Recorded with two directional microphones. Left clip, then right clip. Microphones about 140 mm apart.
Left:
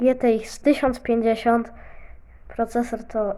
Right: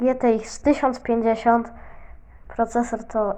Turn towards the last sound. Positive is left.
turn(degrees=20)  # may be behind; listen again after turning